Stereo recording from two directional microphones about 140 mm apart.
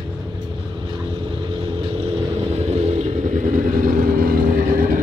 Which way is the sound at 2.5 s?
50° right (ahead or behind).